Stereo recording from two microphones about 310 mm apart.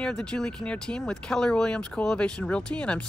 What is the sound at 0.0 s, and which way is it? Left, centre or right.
Speech, centre.